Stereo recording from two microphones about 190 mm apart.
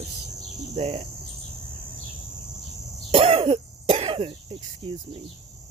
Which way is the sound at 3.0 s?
30° right (ahead or behind).